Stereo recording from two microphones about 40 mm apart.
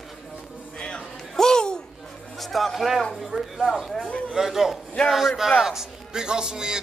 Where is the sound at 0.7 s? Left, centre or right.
Left.